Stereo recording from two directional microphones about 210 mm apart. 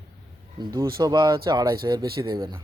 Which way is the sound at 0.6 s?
15° right (ahead or behind).